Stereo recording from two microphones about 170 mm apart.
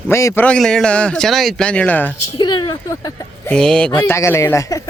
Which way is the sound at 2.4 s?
20° left (ahead or behind).